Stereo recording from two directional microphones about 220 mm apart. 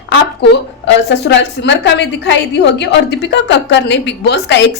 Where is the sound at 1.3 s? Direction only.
55° left (ahead or behind).